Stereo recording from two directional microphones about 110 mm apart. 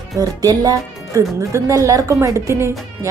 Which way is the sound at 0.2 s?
35° right (ahead or behind).